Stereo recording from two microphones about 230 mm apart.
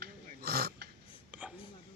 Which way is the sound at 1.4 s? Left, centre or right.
Centre.